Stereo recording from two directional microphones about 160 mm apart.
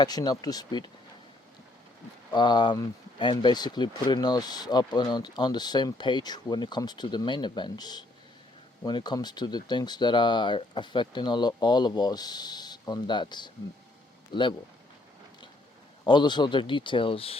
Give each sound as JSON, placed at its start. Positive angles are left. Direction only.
{"t": 0.0, "sound": "speech", "side_deg": 25}
{"t": 2.3, "sound": "speech", "side_deg": 25}
{"t": 16.0, "sound": "speech", "side_deg": 25}